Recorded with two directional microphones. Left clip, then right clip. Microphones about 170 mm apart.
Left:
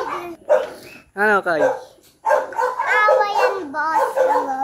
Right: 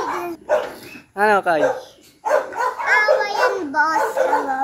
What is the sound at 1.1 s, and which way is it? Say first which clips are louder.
Speech: right 1 dB; 15° left (ahead or behind).